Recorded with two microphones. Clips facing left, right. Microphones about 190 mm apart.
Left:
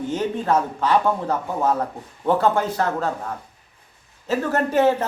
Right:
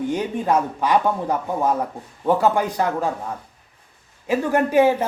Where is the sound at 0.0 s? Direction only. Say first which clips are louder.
Right 1 dB; 15° right (ahead or behind).